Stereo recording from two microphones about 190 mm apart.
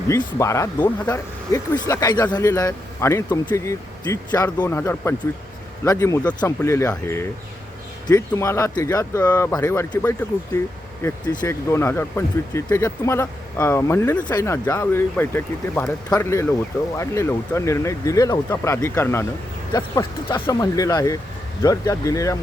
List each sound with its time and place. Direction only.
0.1 s speech: 15° left (ahead or behind)